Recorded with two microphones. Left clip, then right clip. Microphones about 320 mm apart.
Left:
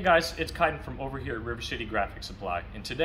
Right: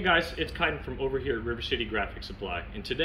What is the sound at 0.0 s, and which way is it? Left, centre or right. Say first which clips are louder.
Speech: left 2 dB; centre.